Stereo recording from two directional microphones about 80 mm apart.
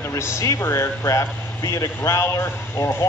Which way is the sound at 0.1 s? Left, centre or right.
Left.